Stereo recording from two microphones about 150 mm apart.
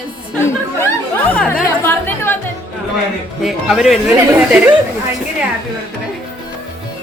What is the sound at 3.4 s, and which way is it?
Speech, centre (ahead or behind).